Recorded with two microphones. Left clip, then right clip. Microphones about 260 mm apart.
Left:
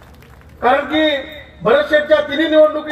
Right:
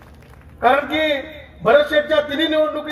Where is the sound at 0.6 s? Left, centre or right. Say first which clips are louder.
Left 2 dB; right.